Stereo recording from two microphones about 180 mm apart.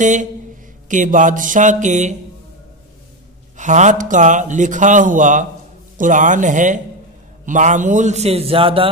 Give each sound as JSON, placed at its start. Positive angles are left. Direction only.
{"t": 0.0, "sound": "a man's voice", "side_deg": -45}
{"t": 3.5, "sound": "a man's voice", "side_deg": -40}